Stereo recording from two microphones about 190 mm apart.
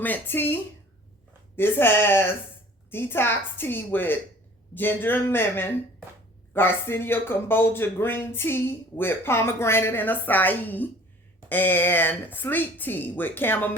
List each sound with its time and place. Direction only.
0.0 s speech: 10° left (ahead or behind)